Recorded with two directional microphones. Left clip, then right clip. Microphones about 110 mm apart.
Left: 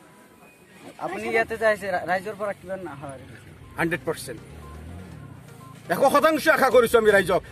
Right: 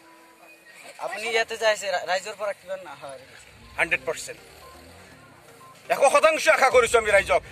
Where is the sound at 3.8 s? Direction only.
5° right (ahead or behind).